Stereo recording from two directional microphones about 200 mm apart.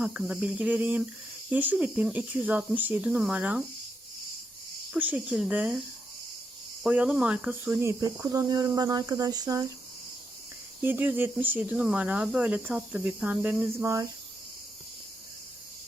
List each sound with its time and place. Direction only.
0.0 s speech: 5° right (ahead or behind)
4.9 s speech: 5° right (ahead or behind)
6.8 s speech: 5° right (ahead or behind)
10.8 s speech: 10° right (ahead or behind)